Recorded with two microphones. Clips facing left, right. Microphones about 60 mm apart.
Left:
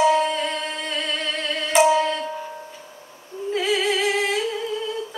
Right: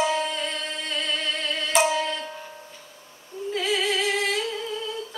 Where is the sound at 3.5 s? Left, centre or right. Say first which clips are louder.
Left 3 dB; centre.